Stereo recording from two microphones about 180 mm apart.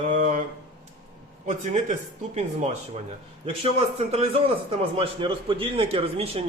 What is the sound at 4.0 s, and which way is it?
Speech, 35° right (ahead or behind).